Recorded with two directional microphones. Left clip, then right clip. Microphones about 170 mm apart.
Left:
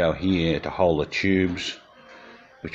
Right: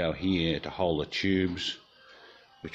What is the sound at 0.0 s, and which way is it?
Speech, 15° right (ahead or behind).